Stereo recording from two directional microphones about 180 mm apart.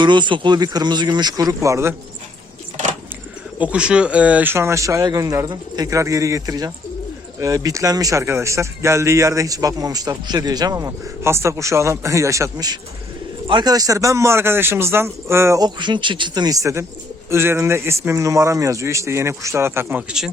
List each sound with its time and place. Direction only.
0.0 s speech: 25° right (ahead or behind)
3.6 s speech: 5° right (ahead or behind)